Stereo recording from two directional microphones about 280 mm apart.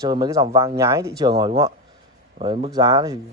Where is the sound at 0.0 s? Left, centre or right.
Centre.